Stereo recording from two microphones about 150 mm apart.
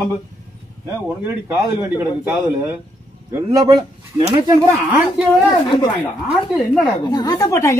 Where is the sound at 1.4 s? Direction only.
20° right (ahead or behind).